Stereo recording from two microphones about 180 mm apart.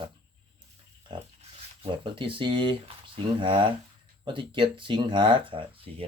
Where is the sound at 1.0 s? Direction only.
30° right (ahead or behind).